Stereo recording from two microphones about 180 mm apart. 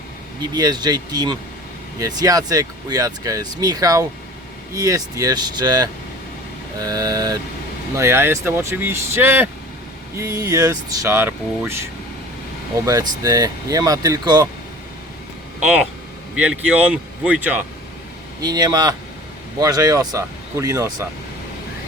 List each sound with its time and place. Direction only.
0.5 s speech: 20° right (ahead or behind)
16.4 s speech: 5° right (ahead or behind)
18.3 s speech: 20° right (ahead or behind)